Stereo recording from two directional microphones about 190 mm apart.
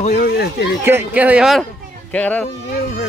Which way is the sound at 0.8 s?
10° right (ahead or behind).